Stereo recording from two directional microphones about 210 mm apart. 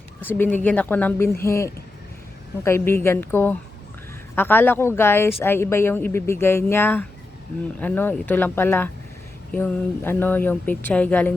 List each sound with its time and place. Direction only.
0.2 s speech: 10° left (ahead or behind)